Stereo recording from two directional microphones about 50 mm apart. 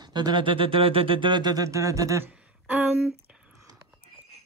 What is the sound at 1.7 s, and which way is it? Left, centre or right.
Speech, right.